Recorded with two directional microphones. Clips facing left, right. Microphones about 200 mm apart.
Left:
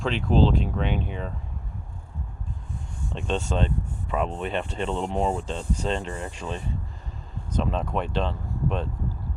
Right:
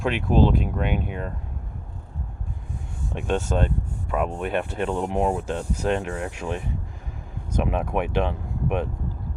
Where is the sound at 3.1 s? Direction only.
10° right (ahead or behind).